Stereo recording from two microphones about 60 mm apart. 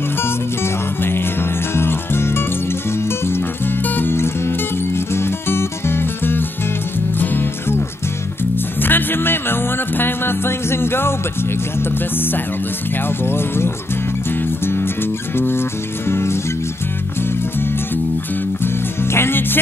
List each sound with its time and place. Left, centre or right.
1.8 s music: left
8.8 s music: left
13.2 s speech: left
15.3 s speech: left
16.1 s music: left
19.1 s music: left